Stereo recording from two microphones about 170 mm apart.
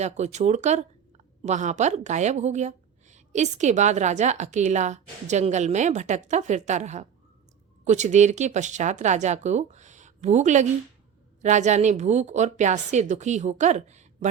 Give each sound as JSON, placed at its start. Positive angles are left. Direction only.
{"t": 0.0, "sound": "speech", "side_deg": -40}